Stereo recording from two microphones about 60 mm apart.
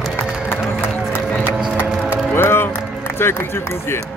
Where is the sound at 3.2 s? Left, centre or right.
Left.